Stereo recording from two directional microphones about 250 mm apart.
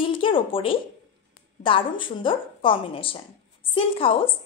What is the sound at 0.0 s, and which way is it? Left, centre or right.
Speech, left.